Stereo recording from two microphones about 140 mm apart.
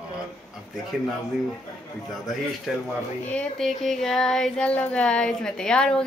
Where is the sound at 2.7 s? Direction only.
Centre (ahead or behind).